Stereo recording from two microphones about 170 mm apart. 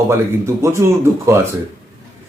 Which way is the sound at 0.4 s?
15° right (ahead or behind).